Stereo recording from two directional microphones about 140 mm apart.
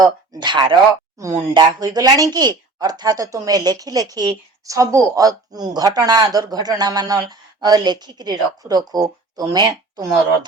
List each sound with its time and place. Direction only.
0.0 s a woman's voice: 35° right (ahead or behind)